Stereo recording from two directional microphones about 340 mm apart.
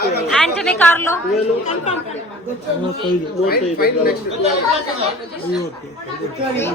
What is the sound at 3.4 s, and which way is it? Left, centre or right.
Speech, left.